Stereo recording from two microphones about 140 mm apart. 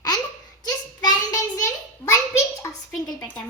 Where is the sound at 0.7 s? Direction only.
30° left (ahead or behind).